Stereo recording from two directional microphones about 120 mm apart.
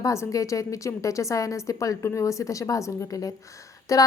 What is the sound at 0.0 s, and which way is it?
A woman's voice, 25° left (ahead or behind).